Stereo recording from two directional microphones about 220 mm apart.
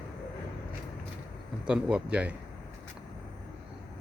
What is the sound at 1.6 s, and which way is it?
Speech, 5° right (ahead or behind).